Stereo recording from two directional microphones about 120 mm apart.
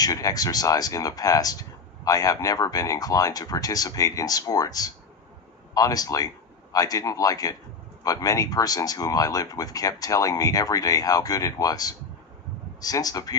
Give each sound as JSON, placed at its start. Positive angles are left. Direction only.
{"t": 0.0, "sound": "speech", "side_deg": 30}